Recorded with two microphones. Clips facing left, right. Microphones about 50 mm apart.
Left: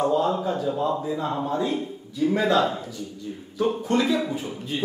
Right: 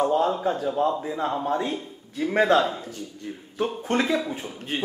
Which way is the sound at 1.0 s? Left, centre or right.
Right.